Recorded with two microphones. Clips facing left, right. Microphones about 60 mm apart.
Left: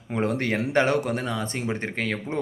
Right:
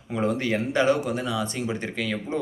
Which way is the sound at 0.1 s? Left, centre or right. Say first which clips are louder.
Even; left.